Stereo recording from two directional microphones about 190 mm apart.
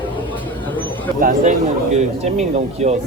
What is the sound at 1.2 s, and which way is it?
Speech, 45° right (ahead or behind).